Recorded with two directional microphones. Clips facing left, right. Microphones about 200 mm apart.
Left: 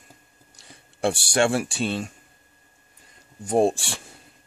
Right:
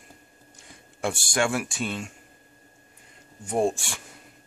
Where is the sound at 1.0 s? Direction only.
30° left (ahead or behind).